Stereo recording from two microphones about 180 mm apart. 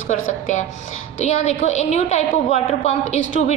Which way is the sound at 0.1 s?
40° left (ahead or behind).